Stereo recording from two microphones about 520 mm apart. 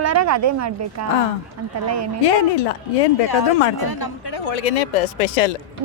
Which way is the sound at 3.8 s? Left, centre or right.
Left.